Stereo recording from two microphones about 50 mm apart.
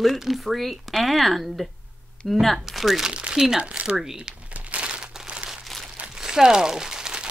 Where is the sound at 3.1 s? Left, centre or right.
Centre.